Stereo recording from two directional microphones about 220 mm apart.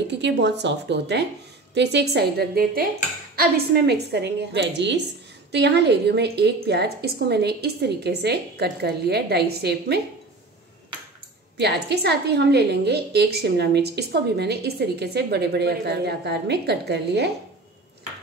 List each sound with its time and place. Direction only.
0.1 s a woman's voice: 50° right (ahead or behind)
11.5 s a woman's voice: 50° right (ahead or behind)